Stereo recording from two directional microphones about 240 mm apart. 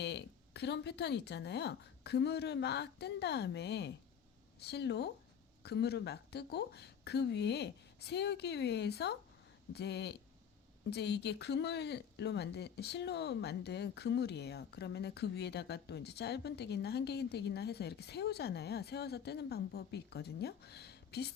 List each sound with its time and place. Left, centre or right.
0.0 s speech: left